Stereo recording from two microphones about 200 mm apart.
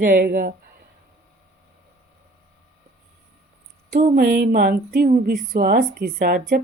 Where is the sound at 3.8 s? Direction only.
45° right (ahead or behind).